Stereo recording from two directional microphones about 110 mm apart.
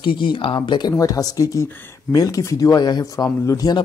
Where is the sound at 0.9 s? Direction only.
30° left (ahead or behind).